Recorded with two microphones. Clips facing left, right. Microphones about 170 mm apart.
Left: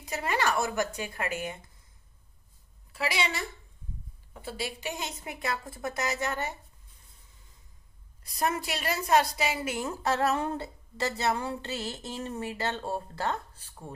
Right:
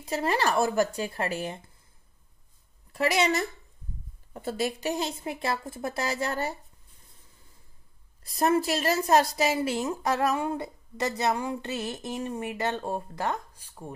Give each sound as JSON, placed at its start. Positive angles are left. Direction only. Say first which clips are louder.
{"t": 0.1, "sound": "a woman's voice", "louder": "right 3 dB", "side_deg": -35}
{"t": 2.9, "sound": "a woman's voice", "louder": "right 6 dB", "side_deg": -40}
{"t": 8.2, "sound": "a woman's voice", "louder": "right 6 dB", "side_deg": -35}
{"t": 9.6, "sound": "speech", "louder": "right 5 dB", "side_deg": -25}